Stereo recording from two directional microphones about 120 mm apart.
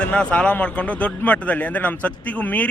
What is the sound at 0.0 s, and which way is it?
A man's voice, 10° left (ahead or behind).